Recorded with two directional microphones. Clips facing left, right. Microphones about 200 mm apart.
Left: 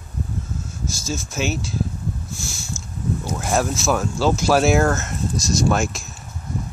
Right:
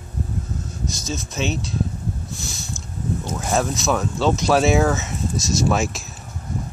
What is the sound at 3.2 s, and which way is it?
Speech, centre (ahead or behind).